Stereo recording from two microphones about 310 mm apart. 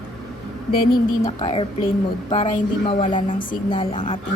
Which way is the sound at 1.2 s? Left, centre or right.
Centre.